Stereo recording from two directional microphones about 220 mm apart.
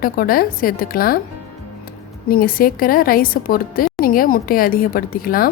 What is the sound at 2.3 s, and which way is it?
A woman's voice, 40° left (ahead or behind).